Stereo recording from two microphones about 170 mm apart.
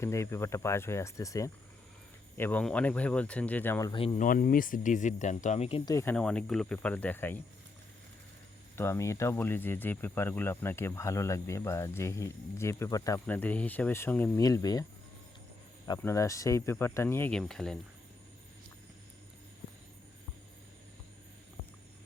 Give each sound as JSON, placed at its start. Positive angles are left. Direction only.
{"t": 0.0, "sound": "speech", "side_deg": 15}
{"t": 2.4, "sound": "speech", "side_deg": 10}
{"t": 3.9, "sound": "speech", "side_deg": 35}
{"t": 4.2, "sound": "speech", "side_deg": 50}
{"t": 5.8, "sound": "speech", "side_deg": 15}
{"t": 6.1, "sound": "speech", "side_deg": 5}
{"t": 8.7, "sound": "speech", "side_deg": 15}
{"t": 16.0, "sound": "speech", "side_deg": 15}